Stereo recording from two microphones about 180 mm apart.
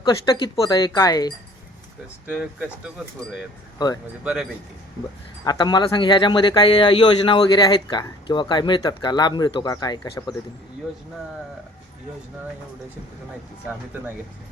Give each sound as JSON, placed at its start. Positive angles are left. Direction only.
{"t": 0.0, "sound": "a man's voice", "side_deg": 25}
{"t": 2.2, "sound": "speech", "side_deg": -5}
{"t": 4.2, "sound": "speech", "side_deg": -5}
{"t": 5.5, "sound": "a man's voice", "side_deg": 25}